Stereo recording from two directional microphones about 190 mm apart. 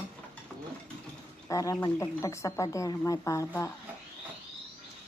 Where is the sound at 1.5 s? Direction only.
15° left (ahead or behind).